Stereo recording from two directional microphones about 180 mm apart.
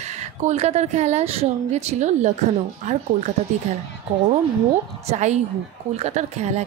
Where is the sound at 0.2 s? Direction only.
40° right (ahead or behind).